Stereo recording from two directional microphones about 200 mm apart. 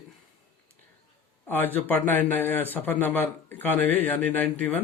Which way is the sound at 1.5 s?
10° left (ahead or behind).